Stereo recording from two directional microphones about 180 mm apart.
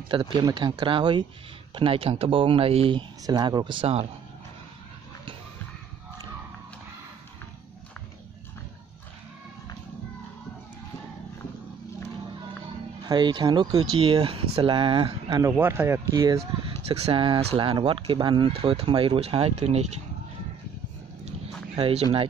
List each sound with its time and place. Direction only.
0.1 s speech: 25° right (ahead or behind)
13.0 s speech: 25° right (ahead or behind)
15.5 s speech: 10° right (ahead or behind)
16.8 s speech: 35° right (ahead or behind)
21.7 s speech: 30° right (ahead or behind)